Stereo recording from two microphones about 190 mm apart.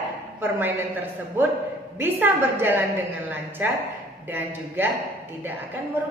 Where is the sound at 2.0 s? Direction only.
10° right (ahead or behind).